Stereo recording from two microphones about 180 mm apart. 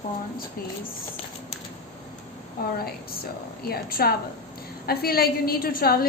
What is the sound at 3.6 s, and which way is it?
A woman's voice, 55° left (ahead or behind).